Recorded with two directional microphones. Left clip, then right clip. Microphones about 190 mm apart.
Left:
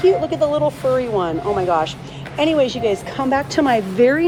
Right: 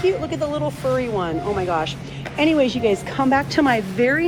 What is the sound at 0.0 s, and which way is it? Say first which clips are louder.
Speech: left 6 dB; 15° left (ahead or behind).